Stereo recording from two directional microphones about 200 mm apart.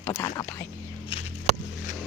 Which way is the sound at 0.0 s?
15° left (ahead or behind).